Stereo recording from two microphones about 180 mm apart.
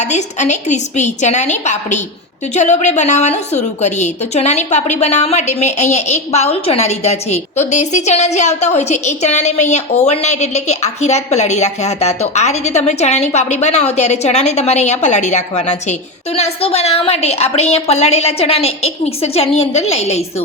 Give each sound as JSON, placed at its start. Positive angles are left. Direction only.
{"t": 0.0, "sound": "a woman's voice", "side_deg": 40}